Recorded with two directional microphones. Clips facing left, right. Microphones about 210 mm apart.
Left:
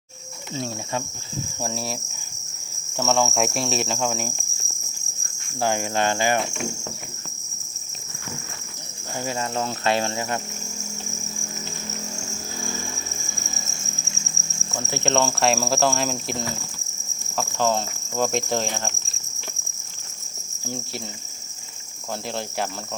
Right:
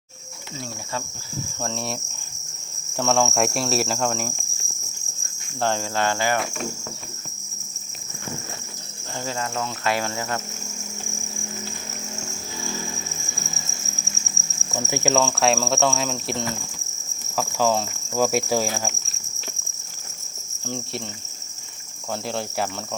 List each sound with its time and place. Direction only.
1.6 s cricket: 5° left (ahead or behind)
5.5 s cricket: 10° left (ahead or behind)
9.6 s cricket: 30° left (ahead or behind)
14.7 s speech: 15° right (ahead or behind)
15.2 s cricket: centre (ahead or behind)
20.7 s cricket: 5° left (ahead or behind)
22.3 s cricket: centre (ahead or behind)